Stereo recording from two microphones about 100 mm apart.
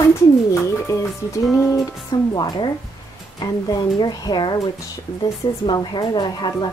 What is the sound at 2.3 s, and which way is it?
Speech, 45° left (ahead or behind).